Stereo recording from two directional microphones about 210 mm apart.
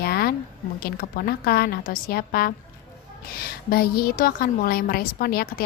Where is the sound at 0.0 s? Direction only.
45° left (ahead or behind).